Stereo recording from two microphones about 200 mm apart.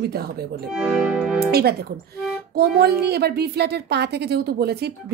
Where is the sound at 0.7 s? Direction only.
5° right (ahead or behind).